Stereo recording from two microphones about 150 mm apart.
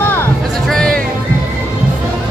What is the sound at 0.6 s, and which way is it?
Music, 5° left (ahead or behind).